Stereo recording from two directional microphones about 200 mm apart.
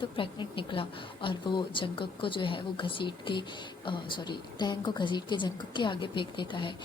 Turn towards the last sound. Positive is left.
turn(degrees=25)  # may be behind; listen again after turning